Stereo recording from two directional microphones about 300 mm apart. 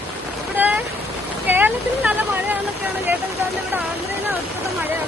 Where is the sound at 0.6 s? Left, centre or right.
Centre.